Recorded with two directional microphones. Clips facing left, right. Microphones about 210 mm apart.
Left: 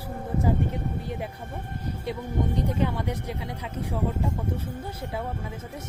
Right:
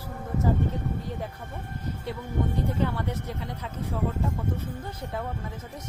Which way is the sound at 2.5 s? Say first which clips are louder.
Left 1 dB; 15° left (ahead or behind).